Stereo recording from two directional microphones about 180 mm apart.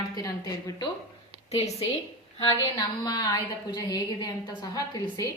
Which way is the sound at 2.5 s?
20° left (ahead or behind).